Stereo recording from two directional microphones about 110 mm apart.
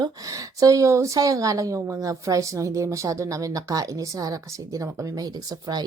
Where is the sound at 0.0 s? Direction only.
30° right (ahead or behind).